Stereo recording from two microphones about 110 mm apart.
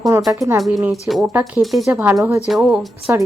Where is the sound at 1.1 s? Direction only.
20° right (ahead or behind).